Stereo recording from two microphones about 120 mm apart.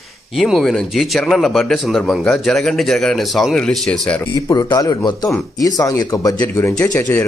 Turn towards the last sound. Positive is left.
turn(degrees=15)  # may be behind; listen again after turning